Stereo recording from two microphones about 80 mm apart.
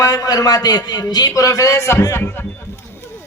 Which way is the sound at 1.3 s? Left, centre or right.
Left.